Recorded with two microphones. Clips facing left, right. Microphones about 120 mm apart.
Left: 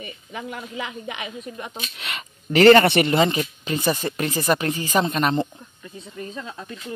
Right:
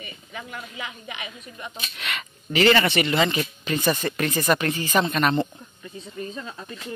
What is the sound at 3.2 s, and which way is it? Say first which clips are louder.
Speech: left 3 dB; 35° left (ahead or behind).